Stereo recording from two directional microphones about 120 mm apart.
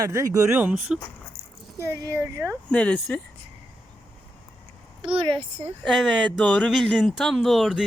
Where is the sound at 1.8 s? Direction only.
25° right (ahead or behind).